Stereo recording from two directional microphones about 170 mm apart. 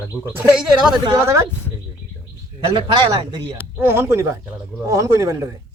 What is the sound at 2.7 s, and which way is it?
Speech, 30° right (ahead or behind).